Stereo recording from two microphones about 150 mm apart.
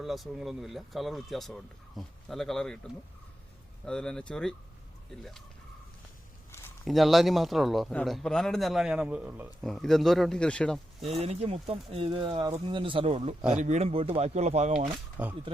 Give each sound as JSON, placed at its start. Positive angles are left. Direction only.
{"t": 0.0, "sound": "speech", "side_deg": 0}
{"t": 3.8, "sound": "speech", "side_deg": 5}
{"t": 6.8, "sound": "speech", "side_deg": 0}
{"t": 9.6, "sound": "speech", "side_deg": 0}
{"t": 11.0, "sound": "speech", "side_deg": -45}
{"t": 15.2, "sound": "speech", "side_deg": -10}